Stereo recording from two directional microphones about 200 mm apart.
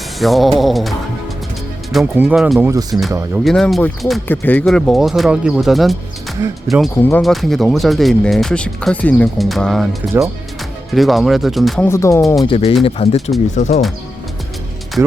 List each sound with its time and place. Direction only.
0.2 s speech: centre (ahead or behind); by 3.4 s 15° right (ahead or behind)
3.4 s speech: centre (ahead or behind)
10.9 s speech: centre (ahead or behind)
11.9 s speech: 15° left (ahead or behind)
12.5 s speech: 25° left (ahead or behind)